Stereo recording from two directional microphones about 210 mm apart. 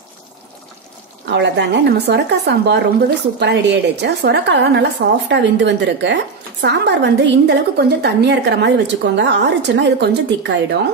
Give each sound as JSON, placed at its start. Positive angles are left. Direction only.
{"t": 1.3, "sound": "speech", "side_deg": -55}